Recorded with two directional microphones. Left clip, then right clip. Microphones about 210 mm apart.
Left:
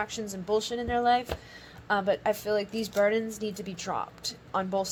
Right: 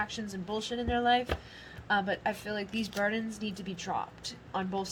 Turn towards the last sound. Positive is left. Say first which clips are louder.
# left 5 dB
turn(degrees=30)  # may be behind; listen again after turning